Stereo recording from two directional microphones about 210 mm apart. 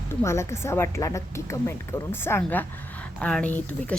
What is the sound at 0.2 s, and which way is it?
Speech, 15° left (ahead or behind).